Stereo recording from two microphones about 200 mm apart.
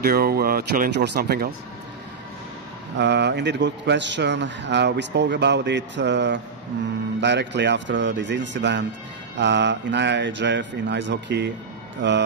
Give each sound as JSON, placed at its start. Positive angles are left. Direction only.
{"t": 0.0, "sound": "speech", "side_deg": -50}
{"t": 3.0, "sound": "a man's voice", "side_deg": -60}